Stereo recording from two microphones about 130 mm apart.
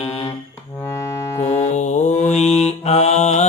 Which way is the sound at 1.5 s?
60° left (ahead or behind).